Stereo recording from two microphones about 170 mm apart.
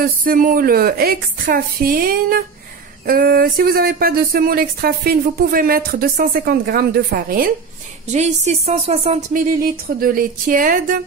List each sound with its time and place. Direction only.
0.0 s speech: 60° right (ahead or behind)
8.1 s a woman's voice: 40° right (ahead or behind)
9.9 s speech: 55° right (ahead or behind)